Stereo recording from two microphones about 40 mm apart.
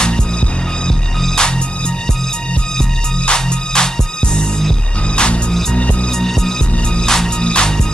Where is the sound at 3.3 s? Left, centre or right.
Left.